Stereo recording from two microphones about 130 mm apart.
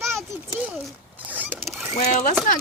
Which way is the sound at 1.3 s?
15° right (ahead or behind).